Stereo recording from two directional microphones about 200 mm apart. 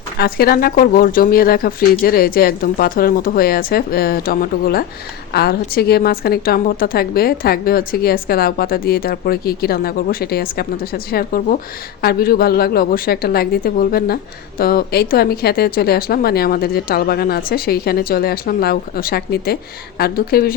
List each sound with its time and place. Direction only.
0.2 s a woman's voice: 50° left (ahead or behind)